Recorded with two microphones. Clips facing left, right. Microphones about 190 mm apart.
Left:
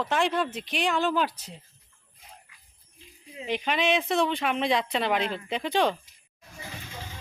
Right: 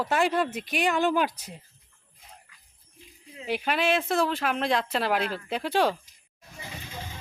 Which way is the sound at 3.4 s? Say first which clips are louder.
Even; 5° right (ahead or behind).